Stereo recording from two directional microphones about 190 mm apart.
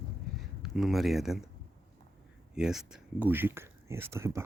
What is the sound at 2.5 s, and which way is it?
Speech, 5° right (ahead or behind).